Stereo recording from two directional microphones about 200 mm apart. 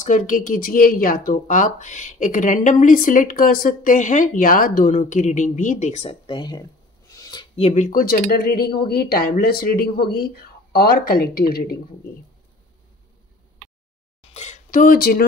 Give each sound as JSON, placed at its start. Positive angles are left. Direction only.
{"t": 0.0, "sound": "speech", "side_deg": 40}
{"t": 7.5, "sound": "speech", "side_deg": 35}
{"t": 14.3, "sound": "a sound", "side_deg": 35}